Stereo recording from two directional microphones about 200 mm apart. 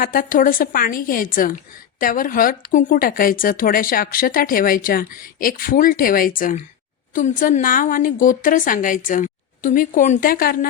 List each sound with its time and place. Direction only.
0.0 s a woman's voice: 45° left (ahead or behind)